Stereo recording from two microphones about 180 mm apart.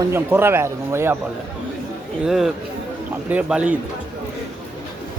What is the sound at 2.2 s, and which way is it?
A man's voice, centre (ahead or behind).